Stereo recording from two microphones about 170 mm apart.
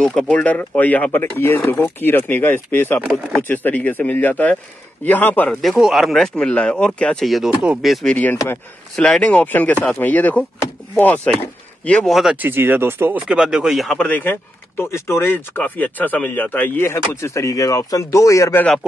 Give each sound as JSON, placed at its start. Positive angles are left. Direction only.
{"t": 0.0, "sound": "speech", "side_deg": 5}
{"t": 3.0, "sound": "speech", "side_deg": -10}
{"t": 3.4, "sound": "speech", "side_deg": 10}